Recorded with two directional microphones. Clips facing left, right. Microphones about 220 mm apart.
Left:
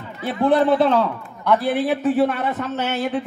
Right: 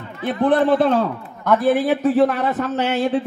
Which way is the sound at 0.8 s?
45° right (ahead or behind).